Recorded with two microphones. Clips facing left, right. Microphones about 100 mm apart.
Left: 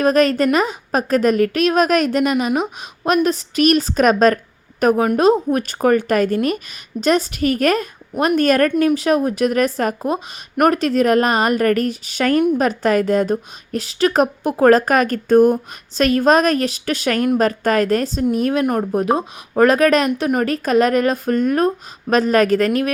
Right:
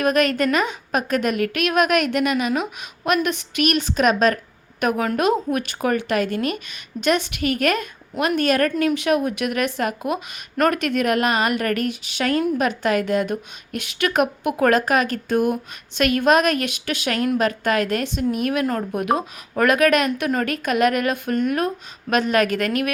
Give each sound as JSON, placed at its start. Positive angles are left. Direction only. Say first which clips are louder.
{"t": 0.0, "sound": "a woman's voice", "louder": "left 4 dB", "side_deg": 35}
{"t": 8.6, "sound": "a woman's voice", "louder": "left 4 dB", "side_deg": 25}
{"t": 12.4, "sound": "speech", "louder": "left 6 dB", "side_deg": 25}
{"t": 12.6, "sound": "a woman's voice", "louder": "left 4 dB", "side_deg": 40}